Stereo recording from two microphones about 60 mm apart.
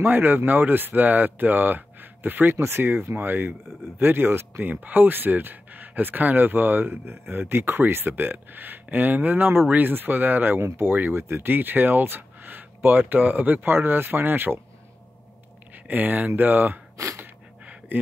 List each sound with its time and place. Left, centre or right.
0.0 s speech: right
2.5 s speech: right
15.7 s speech: right
16.9 s speech: right
17.2 s gasp: right